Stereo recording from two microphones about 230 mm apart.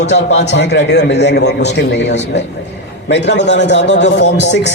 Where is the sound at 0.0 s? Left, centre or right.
Left.